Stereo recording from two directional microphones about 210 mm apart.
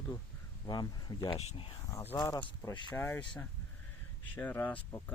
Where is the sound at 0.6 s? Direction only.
20° left (ahead or behind).